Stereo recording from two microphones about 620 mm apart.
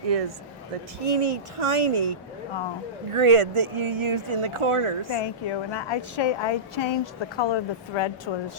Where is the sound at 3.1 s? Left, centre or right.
Right.